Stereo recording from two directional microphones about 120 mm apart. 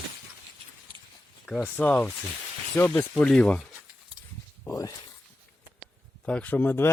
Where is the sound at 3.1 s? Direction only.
5° left (ahead or behind).